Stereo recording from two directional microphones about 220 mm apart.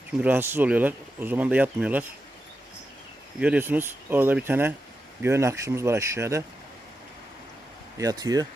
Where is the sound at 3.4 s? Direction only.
5° right (ahead or behind).